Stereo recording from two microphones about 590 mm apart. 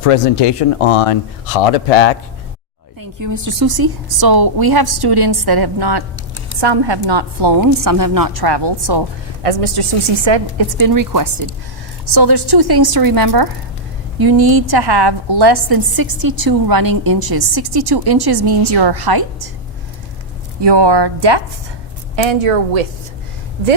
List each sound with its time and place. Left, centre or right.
0.0 s speech: left
3.0 s a woman's voice: right
9.4 s a woman's voice: right
10.2 s a woman's voice: right
20.6 s a woman's voice: right